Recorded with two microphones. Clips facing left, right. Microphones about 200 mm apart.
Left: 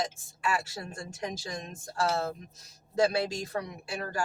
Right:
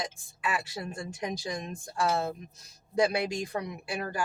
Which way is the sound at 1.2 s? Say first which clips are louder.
Right 2 dB; 15° right (ahead or behind).